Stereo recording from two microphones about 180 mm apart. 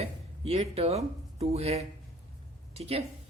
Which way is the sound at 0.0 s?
35° right (ahead or behind).